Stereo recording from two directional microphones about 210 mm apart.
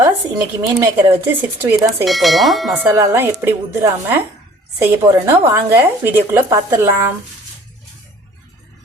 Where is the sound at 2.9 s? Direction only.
15° right (ahead or behind).